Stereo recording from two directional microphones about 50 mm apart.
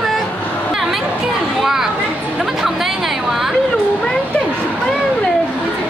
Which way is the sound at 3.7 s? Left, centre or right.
Left.